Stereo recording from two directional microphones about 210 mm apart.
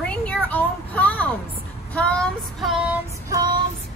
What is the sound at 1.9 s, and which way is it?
Child singing, 5° left (ahead or behind).